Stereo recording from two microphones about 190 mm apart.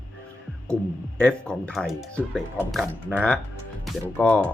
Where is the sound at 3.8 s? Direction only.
5° left (ahead or behind).